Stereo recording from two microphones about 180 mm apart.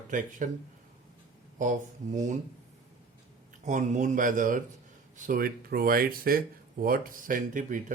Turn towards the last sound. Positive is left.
turn(degrees=-45)  # may be behind; listen again after turning